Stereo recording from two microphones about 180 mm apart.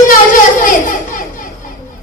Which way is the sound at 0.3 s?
50° left (ahead or behind).